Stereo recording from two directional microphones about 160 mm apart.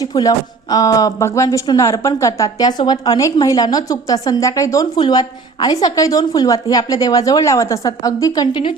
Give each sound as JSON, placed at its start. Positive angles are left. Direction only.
{"t": 0.0, "sound": "speech", "side_deg": 25}